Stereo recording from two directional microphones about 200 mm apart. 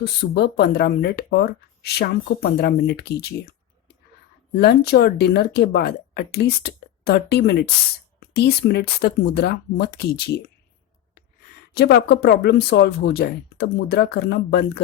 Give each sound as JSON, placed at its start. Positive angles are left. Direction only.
{"t": 0.0, "sound": "speech", "side_deg": 55}
{"t": 4.5, "sound": "speech", "side_deg": 55}
{"t": 11.7, "sound": "speech", "side_deg": 50}